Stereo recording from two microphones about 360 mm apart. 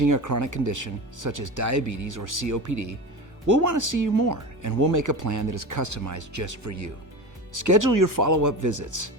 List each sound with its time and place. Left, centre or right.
0.0 s speech: right